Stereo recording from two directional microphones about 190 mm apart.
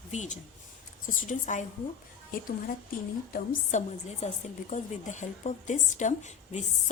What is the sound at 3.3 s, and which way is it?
A woman's voice, 40° left (ahead or behind).